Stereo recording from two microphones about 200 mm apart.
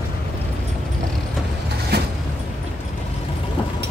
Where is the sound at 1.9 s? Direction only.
55° right (ahead or behind).